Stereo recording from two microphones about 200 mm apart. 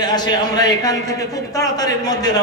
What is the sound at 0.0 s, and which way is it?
Speech, 20° left (ahead or behind).